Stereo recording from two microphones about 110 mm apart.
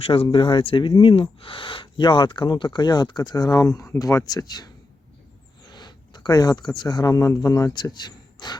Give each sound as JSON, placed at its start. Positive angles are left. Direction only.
{"t": 0.0, "sound": "speech", "side_deg": 55}